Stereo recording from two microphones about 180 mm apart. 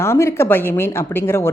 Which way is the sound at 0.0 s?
15° left (ahead or behind).